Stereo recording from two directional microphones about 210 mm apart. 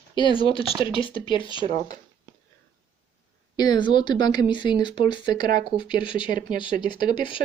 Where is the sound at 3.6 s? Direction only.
20° left (ahead or behind).